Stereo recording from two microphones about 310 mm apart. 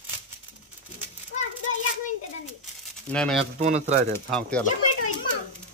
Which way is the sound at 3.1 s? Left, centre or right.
Centre.